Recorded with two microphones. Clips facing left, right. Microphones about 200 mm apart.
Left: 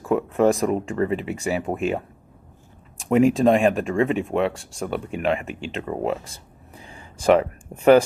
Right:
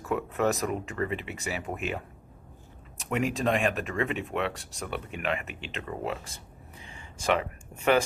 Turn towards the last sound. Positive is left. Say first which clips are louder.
# left 10 dB
turn(degrees=35)  # may be behind; listen again after turning